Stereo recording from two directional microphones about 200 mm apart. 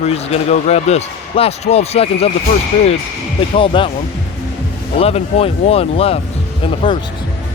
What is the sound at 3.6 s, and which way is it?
Speech, 25° left (ahead or behind).